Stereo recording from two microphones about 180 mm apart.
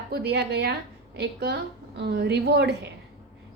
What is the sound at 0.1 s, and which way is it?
A woman's voice, 65° right (ahead or behind).